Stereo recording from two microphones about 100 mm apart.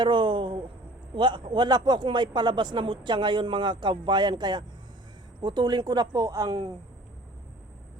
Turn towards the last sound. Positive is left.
turn(degrees=-50)  # may be behind; listen again after turning